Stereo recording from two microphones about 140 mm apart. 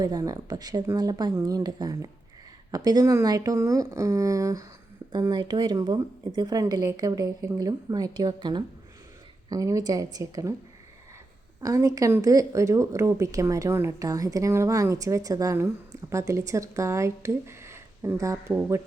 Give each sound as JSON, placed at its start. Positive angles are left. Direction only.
{"t": 0.0, "sound": "speech", "side_deg": -25}
{"t": 11.6, "sound": "speech", "side_deg": -25}